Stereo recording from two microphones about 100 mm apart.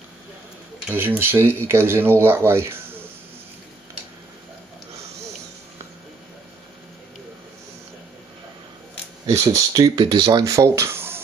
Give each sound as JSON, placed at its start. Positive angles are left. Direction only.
{"t": 0.8, "sound": "speech", "side_deg": -20}
{"t": 9.2, "sound": "speech", "side_deg": -30}